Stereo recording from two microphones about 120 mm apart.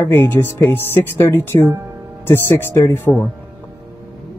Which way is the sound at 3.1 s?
5° right (ahead or behind).